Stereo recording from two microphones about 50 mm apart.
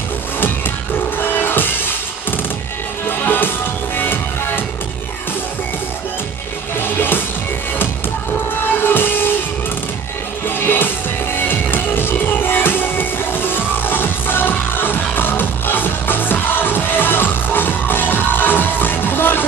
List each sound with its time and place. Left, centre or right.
0.4 s music: left
6.8 s music: left
8.5 s music: left
10.4 s music: left